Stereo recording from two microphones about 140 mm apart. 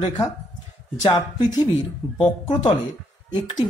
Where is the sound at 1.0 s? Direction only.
35° left (ahead or behind).